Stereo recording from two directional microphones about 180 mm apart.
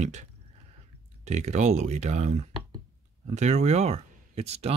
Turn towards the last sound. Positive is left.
turn(degrees=-35)  # may be behind; listen again after turning